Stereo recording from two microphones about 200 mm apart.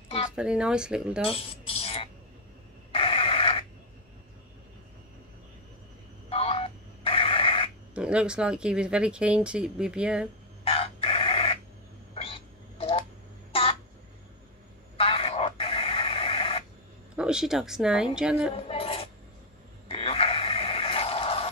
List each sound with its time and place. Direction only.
0.4 s speech: 5° right (ahead or behind)
1.2 s music: 25° left (ahead or behind)
2.9 s printer: 30° left (ahead or behind)
6.2 s telephone dialing: 30° left (ahead or behind)
7.9 s speech: 5° right (ahead or behind)
10.6 s chicken: 30° left (ahead or behind)
12.1 s a sound: 30° left (ahead or behind)
15.0 s radio: 30° left (ahead or behind)
17.1 s speech: 5° right (ahead or behind)
18.5 s a sound: 30° left (ahead or behind)
19.9 s radio: 30° left (ahead or behind)